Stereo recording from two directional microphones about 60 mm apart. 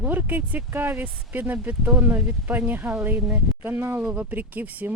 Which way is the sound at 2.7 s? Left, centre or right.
Right.